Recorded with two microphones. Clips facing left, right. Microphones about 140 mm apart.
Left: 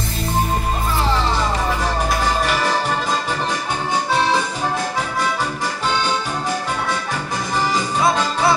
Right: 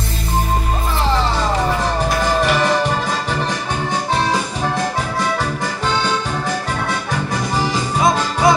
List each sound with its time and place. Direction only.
8.0 s music: 15° right (ahead or behind)